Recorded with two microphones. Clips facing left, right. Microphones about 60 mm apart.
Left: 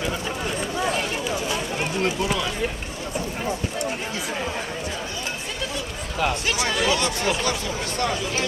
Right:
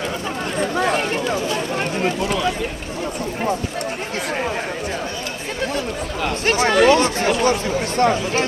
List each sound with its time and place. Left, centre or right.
6.4 s speech: right
7.0 s speech: right